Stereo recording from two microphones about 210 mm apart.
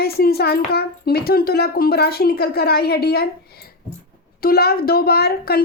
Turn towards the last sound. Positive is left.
turn(degrees=50)  # may be behind; listen again after turning